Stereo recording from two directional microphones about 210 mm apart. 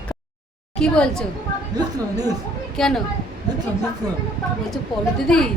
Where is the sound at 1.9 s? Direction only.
15° right (ahead or behind).